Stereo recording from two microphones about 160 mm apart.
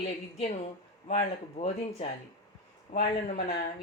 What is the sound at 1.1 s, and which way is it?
Speech, 40° left (ahead or behind).